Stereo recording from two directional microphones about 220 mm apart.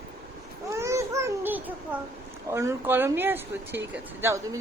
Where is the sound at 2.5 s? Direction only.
10° right (ahead or behind).